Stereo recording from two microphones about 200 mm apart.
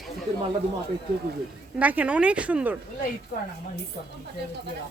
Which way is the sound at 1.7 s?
5° right (ahead or behind).